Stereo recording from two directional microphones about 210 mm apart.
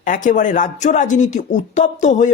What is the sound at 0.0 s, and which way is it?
Speech, 40° left (ahead or behind).